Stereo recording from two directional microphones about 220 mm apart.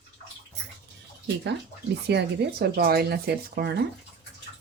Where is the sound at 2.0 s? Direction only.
45° right (ahead or behind).